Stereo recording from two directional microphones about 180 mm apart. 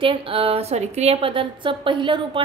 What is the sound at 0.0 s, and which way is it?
A woman's voice, 30° right (ahead or behind).